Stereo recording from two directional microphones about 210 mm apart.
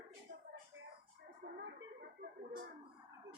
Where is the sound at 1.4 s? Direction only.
45° right (ahead or behind).